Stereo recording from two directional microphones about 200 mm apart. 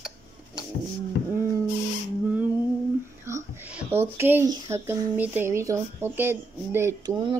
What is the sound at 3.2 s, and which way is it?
Speech, 10° right (ahead or behind).